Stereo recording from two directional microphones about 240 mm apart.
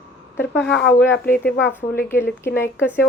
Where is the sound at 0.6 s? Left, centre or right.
Centre.